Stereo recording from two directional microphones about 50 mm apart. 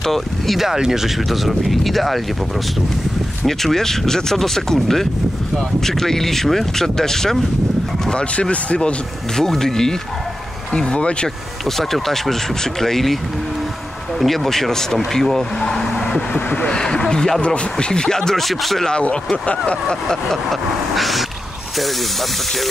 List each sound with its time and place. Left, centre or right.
0.0 s speech: centre
3.4 s speech: centre
8.1 s speech: left
9.4 s speech: centre
10.7 s speech: left
11.8 s speech: centre
14.2 s speech: centre
18.9 s speech: left
20.9 s speech: centre